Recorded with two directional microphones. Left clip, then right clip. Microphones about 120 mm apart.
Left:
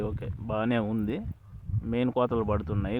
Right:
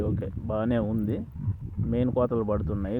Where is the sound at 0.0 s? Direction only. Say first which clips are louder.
Right 3 dB; 30° right (ahead or behind).